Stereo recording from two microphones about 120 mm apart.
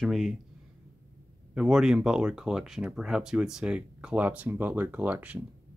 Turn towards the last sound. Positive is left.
turn(degrees=-10)  # may be behind; listen again after turning